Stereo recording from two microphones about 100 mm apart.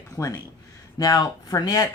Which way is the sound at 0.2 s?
30° left (ahead or behind).